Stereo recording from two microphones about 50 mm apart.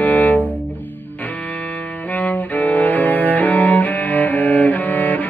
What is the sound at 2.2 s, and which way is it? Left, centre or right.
Cello, left.